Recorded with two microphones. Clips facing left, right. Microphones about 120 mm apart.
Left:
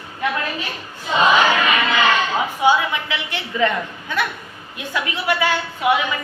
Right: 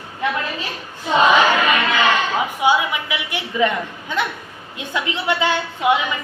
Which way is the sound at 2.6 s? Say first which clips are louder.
Left 1 dB; 15° right (ahead or behind).